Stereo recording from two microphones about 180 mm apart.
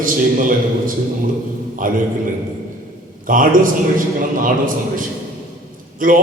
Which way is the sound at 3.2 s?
50° right (ahead or behind).